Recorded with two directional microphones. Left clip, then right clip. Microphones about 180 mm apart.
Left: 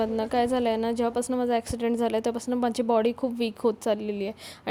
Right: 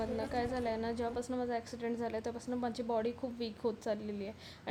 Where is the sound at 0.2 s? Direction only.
45° left (ahead or behind).